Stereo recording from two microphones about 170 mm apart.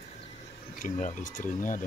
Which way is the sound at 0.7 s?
50° left (ahead or behind).